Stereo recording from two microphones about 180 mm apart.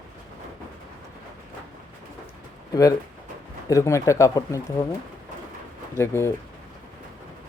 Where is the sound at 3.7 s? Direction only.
15° left (ahead or behind).